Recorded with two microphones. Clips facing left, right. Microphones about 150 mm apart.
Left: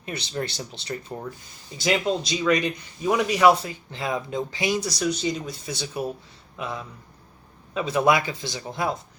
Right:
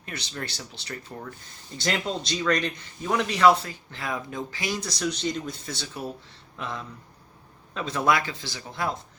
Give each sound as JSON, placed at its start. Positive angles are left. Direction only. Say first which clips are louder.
{"t": 0.0, "sound": "speech", "louder": "left 6 dB", "side_deg": 20}
{"t": 1.8, "sound": "a man's voice", "louder": "left 5 dB", "side_deg": 5}